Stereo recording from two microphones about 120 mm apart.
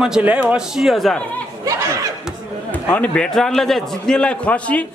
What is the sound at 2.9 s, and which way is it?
A man's voice, 10° left (ahead or behind).